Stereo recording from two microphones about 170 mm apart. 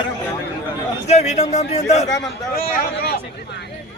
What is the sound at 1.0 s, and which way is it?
A man's voice, 40° left (ahead or behind).